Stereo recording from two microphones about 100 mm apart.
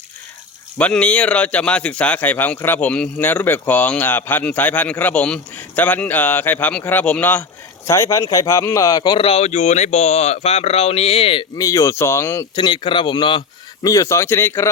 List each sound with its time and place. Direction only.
0.8 s speech: 10° left (ahead or behind)
7.9 s speech: 30° left (ahead or behind)
9.1 s speech: 70° left (ahead or behind)
9.9 s speech: 90° left; by 11.4 s 70° left (ahead or behind)
11.5 s speech: 35° left (ahead or behind)
12.5 s a man's voice: 55° left (ahead or behind)
13.8 s speech: 35° left (ahead or behind)